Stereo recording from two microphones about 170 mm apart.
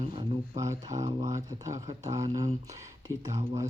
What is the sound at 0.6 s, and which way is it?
Speech, 20° right (ahead or behind).